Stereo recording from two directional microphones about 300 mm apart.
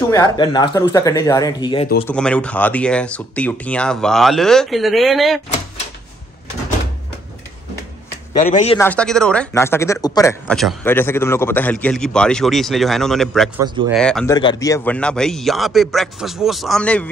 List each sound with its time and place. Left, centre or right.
0.1 s speech: centre
2.0 s speech: centre
8.4 s speech: left
8.7 s speech: centre
10.4 s speech: centre